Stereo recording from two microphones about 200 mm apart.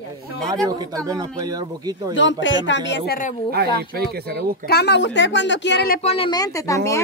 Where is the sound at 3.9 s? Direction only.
50° right (ahead or behind).